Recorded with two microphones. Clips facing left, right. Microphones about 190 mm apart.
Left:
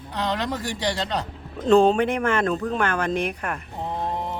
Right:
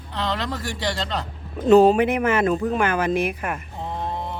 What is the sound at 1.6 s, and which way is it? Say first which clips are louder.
Speech: right 3 dB; 5° right (ahead or behind).